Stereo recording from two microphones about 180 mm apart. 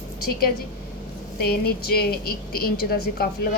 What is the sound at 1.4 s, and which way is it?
A woman's voice, 60° left (ahead or behind).